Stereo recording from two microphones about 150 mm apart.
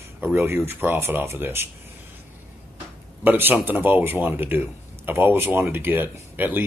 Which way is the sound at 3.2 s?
15° right (ahead or behind).